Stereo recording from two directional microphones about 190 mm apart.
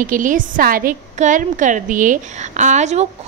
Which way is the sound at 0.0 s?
45° right (ahead or behind).